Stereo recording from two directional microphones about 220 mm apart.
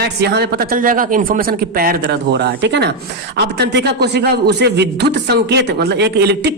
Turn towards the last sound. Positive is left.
turn(degrees=-50)  # may be behind; listen again after turning